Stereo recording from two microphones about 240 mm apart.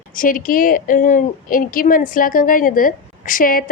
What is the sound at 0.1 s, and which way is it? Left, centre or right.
A woman's voice, left.